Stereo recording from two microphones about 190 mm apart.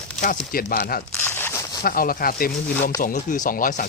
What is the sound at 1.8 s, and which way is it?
Speech, 50° left (ahead or behind).